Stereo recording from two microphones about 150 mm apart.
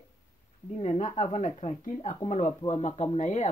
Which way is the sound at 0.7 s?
50° left (ahead or behind).